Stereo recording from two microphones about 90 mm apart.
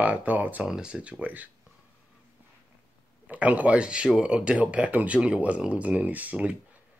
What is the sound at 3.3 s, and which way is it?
Speech, 15° right (ahead or behind).